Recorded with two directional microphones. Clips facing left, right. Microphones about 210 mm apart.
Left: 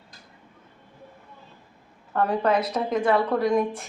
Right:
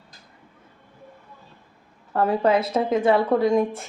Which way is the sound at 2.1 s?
25° right (ahead or behind).